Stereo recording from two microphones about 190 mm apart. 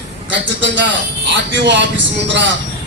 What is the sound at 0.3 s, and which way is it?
A man's voice, 70° right (ahead or behind).